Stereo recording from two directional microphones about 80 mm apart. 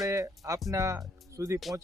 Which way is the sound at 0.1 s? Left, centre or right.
Right.